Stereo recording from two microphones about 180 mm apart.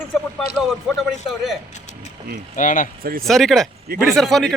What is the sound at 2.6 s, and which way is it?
Speech, 45° left (ahead or behind).